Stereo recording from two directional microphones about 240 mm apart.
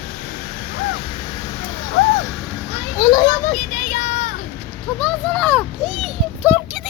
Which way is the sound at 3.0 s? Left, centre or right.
Centre.